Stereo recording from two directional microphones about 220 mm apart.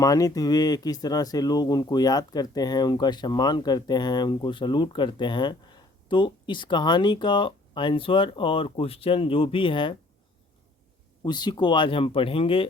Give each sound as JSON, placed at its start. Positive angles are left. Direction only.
{"t": 0.0, "sound": "speech", "side_deg": 15}
{"t": 11.2, "sound": "speech", "side_deg": 20}